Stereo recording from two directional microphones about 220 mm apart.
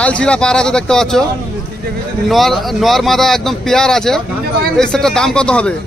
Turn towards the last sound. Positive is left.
turn(degrees=5)  # may be behind; listen again after turning